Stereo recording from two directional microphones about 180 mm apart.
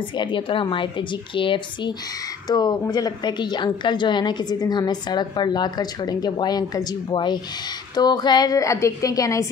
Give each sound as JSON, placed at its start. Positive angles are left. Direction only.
{"t": 0.2, "sound": "a woman's voice", "side_deg": 30}